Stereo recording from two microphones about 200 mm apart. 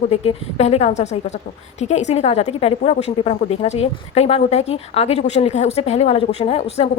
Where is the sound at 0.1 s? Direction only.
30° left (ahead or behind).